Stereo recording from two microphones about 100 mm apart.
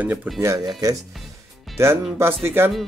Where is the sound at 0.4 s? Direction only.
35° right (ahead or behind).